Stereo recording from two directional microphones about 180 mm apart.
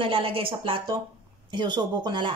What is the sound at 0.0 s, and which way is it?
Speech, 30° right (ahead or behind).